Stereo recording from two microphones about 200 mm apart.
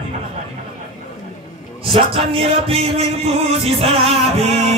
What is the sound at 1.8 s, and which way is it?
Speech, 30° right (ahead or behind).